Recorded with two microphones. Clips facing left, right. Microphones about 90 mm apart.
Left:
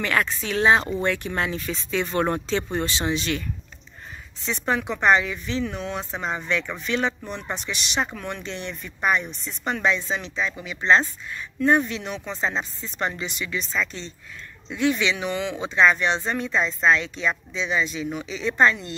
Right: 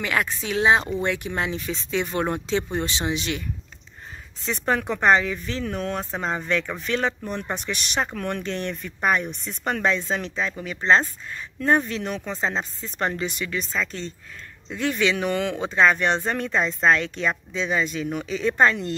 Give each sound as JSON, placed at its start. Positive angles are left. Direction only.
{"t": 0.0, "sound": "speech", "side_deg": -15}
{"t": 4.5, "sound": "speech", "side_deg": -45}